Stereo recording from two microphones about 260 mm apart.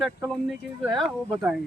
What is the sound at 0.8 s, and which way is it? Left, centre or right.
Speech, centre.